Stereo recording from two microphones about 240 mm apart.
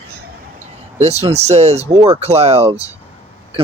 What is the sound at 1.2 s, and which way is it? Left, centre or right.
Speech, right.